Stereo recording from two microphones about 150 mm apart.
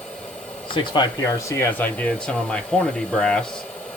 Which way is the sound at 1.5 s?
15° left (ahead or behind).